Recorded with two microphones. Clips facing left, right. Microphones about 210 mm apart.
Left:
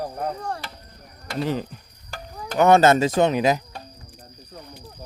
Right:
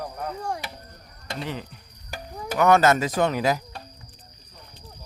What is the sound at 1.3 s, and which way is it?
Speech, 40° left (ahead or behind).